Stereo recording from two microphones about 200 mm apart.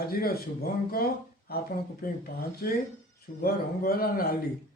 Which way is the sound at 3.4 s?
50° left (ahead or behind).